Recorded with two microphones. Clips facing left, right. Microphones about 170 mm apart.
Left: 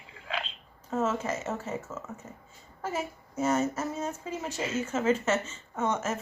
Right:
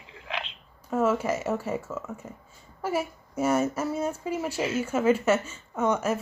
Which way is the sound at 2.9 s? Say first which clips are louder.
Right 5 dB; 10° right (ahead or behind).